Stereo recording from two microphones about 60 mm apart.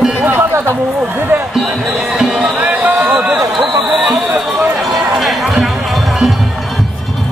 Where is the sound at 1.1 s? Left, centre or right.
Right.